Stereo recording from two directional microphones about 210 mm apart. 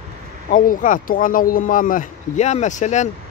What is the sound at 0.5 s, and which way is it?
Speech, 40° left (ahead or behind).